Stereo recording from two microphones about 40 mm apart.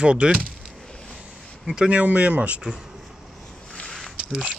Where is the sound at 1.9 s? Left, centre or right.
Right.